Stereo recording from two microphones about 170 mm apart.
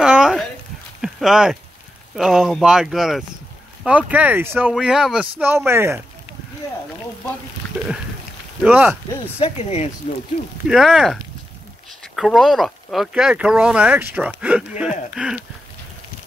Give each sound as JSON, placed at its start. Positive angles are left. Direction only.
{"t": 0.0, "sound": "a sound", "side_deg": -5}
{"t": 2.1, "sound": "speech", "side_deg": -5}
{"t": 8.6, "sound": "speech", "side_deg": -5}
{"t": 9.4, "sound": "speech", "side_deg": 35}
{"t": 10.7, "sound": "speech", "side_deg": 0}